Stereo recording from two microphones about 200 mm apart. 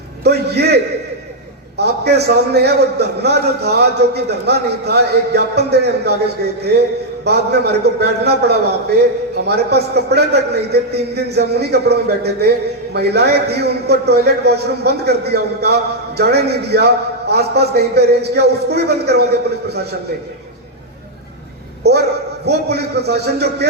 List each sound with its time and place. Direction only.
0.3 s a man's voice: 55° right (ahead or behind)
1.8 s a man's voice: 55° right (ahead or behind)
21.8 s a man's voice: 55° right (ahead or behind)